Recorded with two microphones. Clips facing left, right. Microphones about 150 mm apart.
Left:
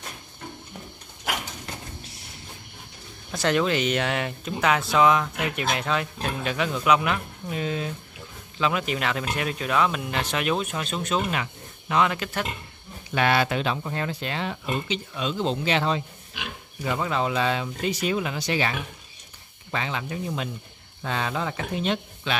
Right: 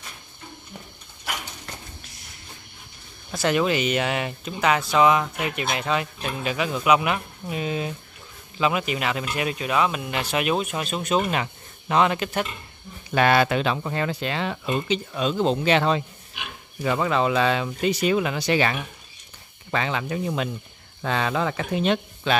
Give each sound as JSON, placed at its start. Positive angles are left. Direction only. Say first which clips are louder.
{"t": 3.3, "sound": "speech", "louder": "right 1 dB", "side_deg": -5}
{"t": 11.9, "sound": "speech", "louder": "right 3 dB", "side_deg": -30}
{"t": 13.1, "sound": "speech", "louder": "right 3 dB", "side_deg": -45}
{"t": 13.5, "sound": "speech", "louder": "right 3 dB", "side_deg": -85}
{"t": 14.9, "sound": "speech", "louder": "right 4 dB", "side_deg": -45}
{"t": 16.8, "sound": "speech", "louder": "right 4 dB", "side_deg": -90}
{"t": 22.3, "sound": "speech", "louder": "right 6 dB", "side_deg": -45}